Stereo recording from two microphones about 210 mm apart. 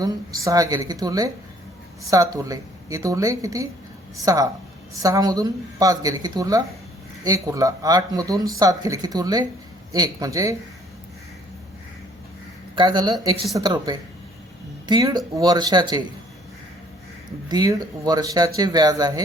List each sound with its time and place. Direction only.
0.0 s speech: 15° right (ahead or behind)
5.0 s speech: 15° right (ahead or behind)
12.7 s speech: 20° right (ahead or behind)
17.5 s speech: 20° right (ahead or behind)